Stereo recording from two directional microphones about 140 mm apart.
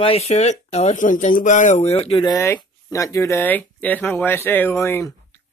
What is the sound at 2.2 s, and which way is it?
Speech, 20° left (ahead or behind).